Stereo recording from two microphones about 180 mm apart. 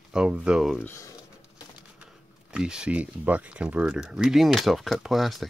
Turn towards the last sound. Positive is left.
turn(degrees=0)  # may be behind; listen again after turning